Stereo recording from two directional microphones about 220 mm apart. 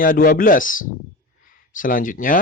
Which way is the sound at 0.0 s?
40° left (ahead or behind).